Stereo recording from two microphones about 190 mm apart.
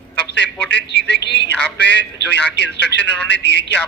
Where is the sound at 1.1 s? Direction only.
65° left (ahead or behind).